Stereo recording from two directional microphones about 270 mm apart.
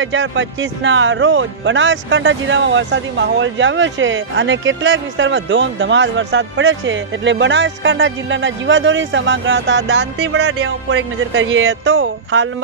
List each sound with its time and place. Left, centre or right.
0.0 s speech: right